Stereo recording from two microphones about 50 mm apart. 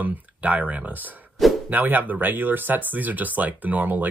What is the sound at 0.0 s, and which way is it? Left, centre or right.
Speech, right.